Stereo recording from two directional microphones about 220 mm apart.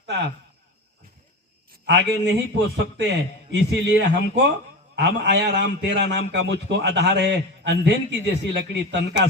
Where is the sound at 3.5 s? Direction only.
50° right (ahead or behind).